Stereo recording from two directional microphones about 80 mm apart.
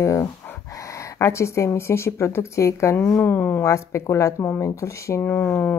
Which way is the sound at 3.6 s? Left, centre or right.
Left.